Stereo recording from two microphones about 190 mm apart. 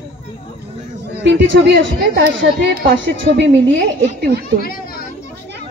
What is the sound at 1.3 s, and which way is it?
A woman's voice, 65° right (ahead or behind).